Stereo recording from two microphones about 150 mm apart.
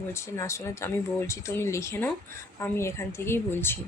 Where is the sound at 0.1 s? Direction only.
20° left (ahead or behind).